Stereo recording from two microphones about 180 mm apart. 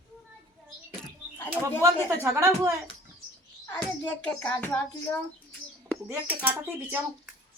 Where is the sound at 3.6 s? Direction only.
20° left (ahead or behind).